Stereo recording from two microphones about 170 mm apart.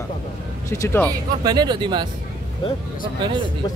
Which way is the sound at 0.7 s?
15° left (ahead or behind).